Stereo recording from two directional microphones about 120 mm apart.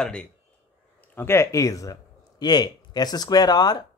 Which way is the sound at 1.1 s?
20° left (ahead or behind).